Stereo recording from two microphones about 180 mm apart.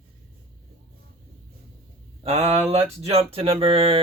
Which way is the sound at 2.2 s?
35° right (ahead or behind).